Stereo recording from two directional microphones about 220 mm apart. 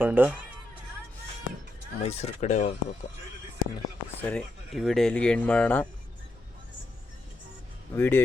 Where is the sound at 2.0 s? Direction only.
30° left (ahead or behind).